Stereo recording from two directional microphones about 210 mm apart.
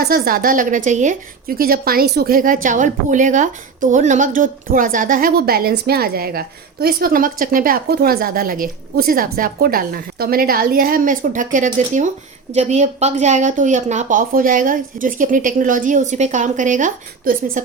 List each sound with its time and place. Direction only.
0.0 s a woman's voice: 45° right (ahead or behind)